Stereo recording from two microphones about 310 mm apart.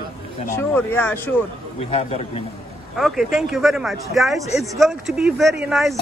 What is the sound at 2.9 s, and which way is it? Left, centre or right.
Speech, centre.